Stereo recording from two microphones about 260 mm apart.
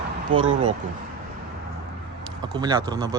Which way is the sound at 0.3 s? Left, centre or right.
Centre.